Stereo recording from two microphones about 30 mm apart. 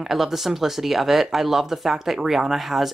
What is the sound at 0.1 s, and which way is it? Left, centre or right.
Speech, centre.